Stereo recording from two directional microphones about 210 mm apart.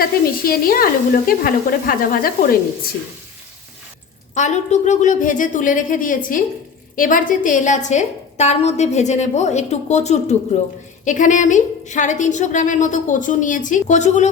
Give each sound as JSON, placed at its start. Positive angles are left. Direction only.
{"t": 0.0, "sound": "sizzle", "side_deg": 45}
{"t": 4.4, "sound": "a woman's voice", "side_deg": 35}